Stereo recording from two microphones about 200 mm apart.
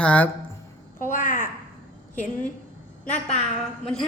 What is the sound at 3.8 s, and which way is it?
Speech, 5° left (ahead or behind).